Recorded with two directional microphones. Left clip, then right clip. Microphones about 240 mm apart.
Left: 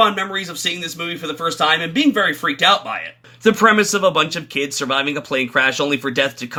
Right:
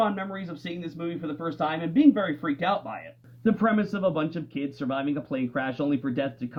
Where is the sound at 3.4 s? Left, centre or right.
Left.